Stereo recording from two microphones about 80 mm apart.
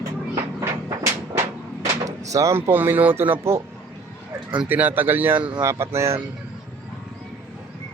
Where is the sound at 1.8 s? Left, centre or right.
Right.